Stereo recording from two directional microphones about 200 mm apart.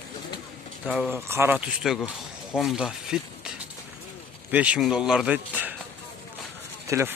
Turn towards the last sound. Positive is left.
turn(degrees=-15)  # may be behind; listen again after turning